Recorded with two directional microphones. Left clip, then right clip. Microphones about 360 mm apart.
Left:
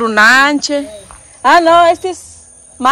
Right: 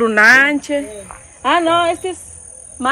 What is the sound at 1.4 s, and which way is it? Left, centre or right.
Speech, left.